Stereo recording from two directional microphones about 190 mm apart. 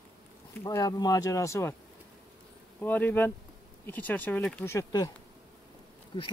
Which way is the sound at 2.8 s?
10° left (ahead or behind).